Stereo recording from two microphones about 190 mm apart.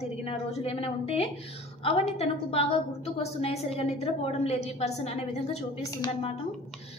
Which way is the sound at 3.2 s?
30° left (ahead or behind).